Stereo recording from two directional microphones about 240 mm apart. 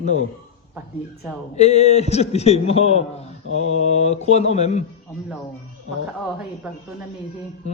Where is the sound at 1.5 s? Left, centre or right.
Left.